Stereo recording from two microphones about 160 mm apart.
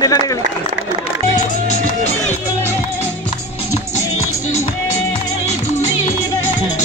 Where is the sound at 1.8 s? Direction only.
50° left (ahead or behind).